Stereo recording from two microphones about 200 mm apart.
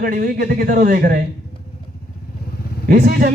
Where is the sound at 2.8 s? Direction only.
45° right (ahead or behind).